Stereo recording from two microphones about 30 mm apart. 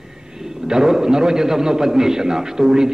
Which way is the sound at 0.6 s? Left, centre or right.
Centre.